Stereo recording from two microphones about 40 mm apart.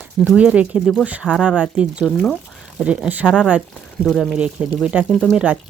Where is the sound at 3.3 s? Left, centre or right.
Right.